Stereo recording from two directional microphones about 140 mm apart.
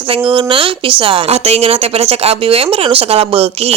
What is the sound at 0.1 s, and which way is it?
A woman's voice, 40° right (ahead or behind).